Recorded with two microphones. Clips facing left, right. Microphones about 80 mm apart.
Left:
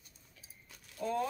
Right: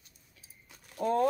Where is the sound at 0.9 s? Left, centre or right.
Right.